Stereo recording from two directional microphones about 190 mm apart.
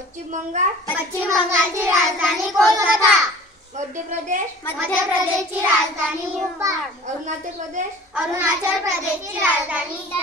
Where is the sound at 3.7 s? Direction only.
40° right (ahead or behind).